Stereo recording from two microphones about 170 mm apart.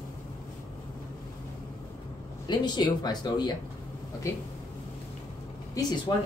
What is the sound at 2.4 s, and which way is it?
Speech, 25° left (ahead or behind).